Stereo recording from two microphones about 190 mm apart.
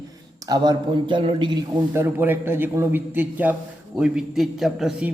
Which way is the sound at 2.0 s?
15° right (ahead or behind).